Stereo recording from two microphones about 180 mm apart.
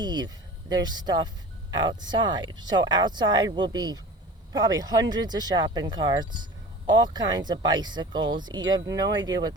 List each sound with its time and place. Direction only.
0.0 s speech: 25° right (ahead or behind)